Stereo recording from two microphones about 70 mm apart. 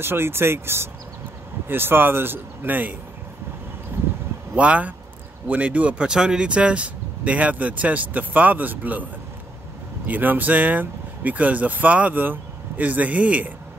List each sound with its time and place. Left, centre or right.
0.0 s speech: right
3.9 s a sound: right
4.6 s speech: centre
10.0 s speech: right